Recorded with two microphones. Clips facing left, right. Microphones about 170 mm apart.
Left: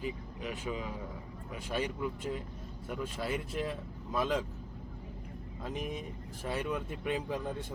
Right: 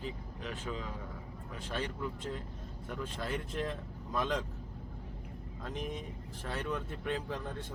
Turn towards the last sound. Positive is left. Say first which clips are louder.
# left 3 dB
turn(degrees=10)  # may be behind; listen again after turning